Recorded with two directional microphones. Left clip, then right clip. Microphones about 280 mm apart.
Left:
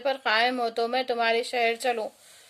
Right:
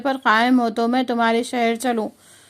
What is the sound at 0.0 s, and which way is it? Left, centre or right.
A woman's voice, centre.